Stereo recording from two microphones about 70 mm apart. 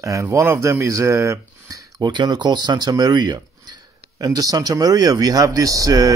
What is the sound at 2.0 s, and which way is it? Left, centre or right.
Speech, right.